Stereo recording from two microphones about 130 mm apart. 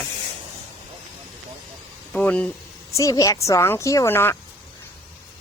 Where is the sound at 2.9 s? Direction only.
25° left (ahead or behind).